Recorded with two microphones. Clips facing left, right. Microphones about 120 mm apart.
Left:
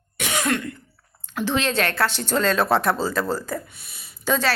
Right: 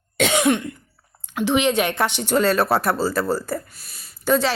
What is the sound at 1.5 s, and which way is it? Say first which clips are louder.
Speech: right 4 dB; 15° right (ahead or behind).